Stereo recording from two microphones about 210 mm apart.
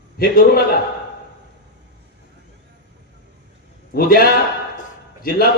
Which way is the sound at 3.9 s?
45° left (ahead or behind).